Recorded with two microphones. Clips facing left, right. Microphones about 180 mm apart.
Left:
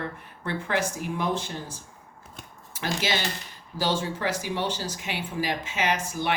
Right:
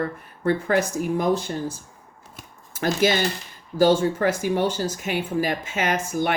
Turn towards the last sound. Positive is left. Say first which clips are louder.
# right 4 dB
turn(degrees=-50)  # may be behind; listen again after turning